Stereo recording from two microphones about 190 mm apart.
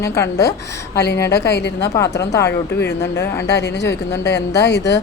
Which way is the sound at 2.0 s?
15° left (ahead or behind).